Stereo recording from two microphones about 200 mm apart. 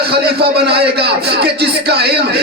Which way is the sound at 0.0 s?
50° right (ahead or behind).